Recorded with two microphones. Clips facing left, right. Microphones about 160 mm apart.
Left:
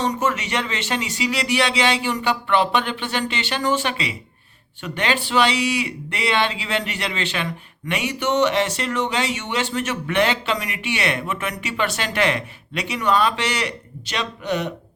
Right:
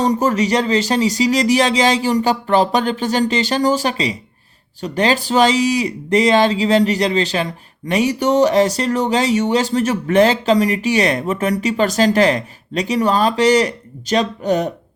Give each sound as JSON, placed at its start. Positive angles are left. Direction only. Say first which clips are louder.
{"t": 0.0, "sound": "speech", "louder": "right 7 dB", "side_deg": -35}